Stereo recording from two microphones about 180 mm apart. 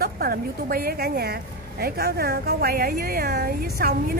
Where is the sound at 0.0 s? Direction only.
55° right (ahead or behind).